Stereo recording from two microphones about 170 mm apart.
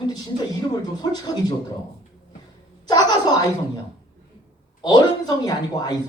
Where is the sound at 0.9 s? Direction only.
25° left (ahead or behind).